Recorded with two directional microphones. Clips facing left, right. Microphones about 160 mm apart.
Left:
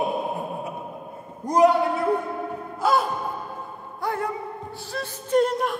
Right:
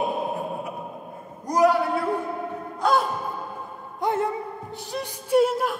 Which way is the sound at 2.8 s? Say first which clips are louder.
Even; centre (ahead or behind).